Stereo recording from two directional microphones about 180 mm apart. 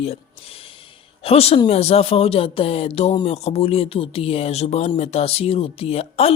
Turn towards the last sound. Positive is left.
turn(degrees=35)  # may be behind; listen again after turning